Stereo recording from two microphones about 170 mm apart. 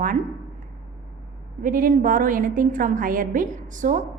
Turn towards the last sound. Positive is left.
turn(degrees=-50)  # may be behind; listen again after turning